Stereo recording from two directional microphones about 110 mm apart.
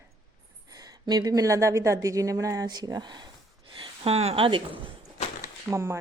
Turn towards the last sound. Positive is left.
turn(degrees=-25)  # may be behind; listen again after turning